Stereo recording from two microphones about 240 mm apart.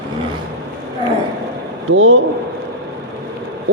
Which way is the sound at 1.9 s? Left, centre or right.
Right.